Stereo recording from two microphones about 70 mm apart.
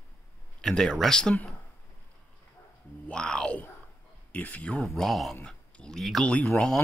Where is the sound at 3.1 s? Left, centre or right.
Centre.